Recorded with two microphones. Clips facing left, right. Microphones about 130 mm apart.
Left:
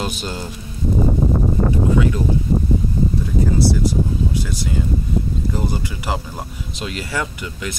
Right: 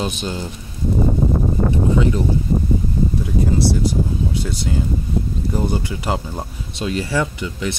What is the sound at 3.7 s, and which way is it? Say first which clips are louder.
Speech: even; 25° right (ahead or behind).